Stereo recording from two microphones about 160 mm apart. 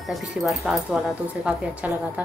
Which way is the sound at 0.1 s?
Centre (ahead or behind).